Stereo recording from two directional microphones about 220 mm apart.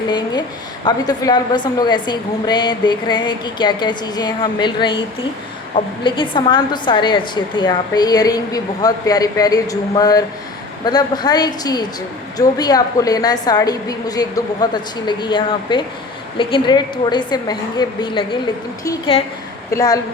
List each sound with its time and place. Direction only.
0.9 s a woman's voice: 20° left (ahead or behind)